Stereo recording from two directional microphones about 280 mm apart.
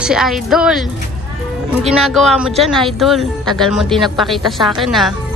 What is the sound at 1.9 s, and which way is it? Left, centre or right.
Speech, centre.